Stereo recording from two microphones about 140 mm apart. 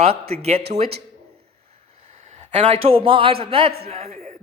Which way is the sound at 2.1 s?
50° right (ahead or behind).